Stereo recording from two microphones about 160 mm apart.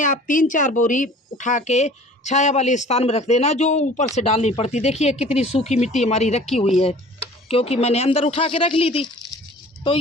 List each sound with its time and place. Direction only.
0.0 s speech: 55° left (ahead or behind)
7.4 s speech: 40° left (ahead or behind)